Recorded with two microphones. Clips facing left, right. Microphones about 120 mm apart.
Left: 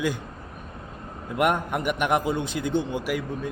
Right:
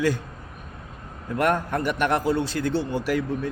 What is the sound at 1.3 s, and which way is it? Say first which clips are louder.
A man's voice: right 1 dB; 15° left (ahead or behind).